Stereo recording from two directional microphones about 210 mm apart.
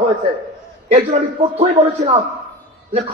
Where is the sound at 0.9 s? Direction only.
30° right (ahead or behind).